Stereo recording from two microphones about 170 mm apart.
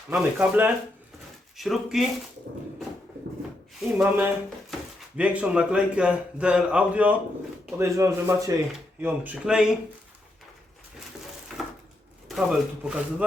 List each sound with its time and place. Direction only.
0.3 s speech: 10° right (ahead or behind)
3.8 s a man's voice: 10° right (ahead or behind)
11.5 s wood: centre (ahead or behind)
12.3 s speech: 5° right (ahead or behind)